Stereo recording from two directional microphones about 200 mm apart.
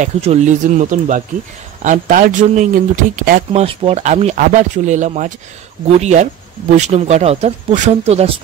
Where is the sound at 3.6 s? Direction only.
30° right (ahead or behind).